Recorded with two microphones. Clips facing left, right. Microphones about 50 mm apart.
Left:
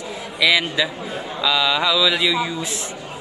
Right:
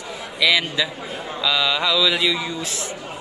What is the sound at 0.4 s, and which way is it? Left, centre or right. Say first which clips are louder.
Mantra: left 1 dB; centre.